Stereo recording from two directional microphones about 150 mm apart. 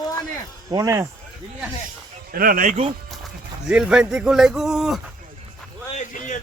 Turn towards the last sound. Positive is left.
turn(degrees=55)  # may be behind; listen again after turning